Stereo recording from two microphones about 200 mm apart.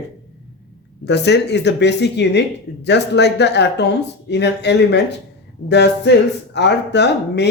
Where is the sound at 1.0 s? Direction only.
60° left (ahead or behind).